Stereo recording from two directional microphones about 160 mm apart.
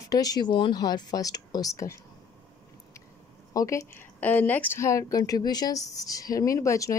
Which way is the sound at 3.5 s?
20° left (ahead or behind).